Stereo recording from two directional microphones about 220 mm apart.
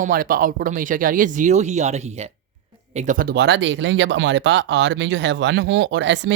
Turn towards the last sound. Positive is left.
turn(degrees=-55)  # may be behind; listen again after turning